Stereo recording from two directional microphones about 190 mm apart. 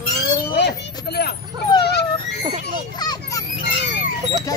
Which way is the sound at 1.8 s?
60° left (ahead or behind).